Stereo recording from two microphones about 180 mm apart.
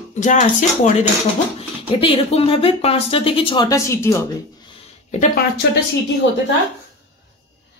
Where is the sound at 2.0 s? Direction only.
35° left (ahead or behind); by 4.2 s 15° left (ahead or behind).